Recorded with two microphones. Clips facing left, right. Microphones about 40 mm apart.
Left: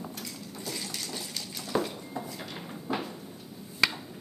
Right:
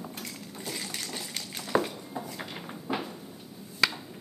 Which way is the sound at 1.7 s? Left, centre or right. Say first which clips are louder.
Right 2 dB; right.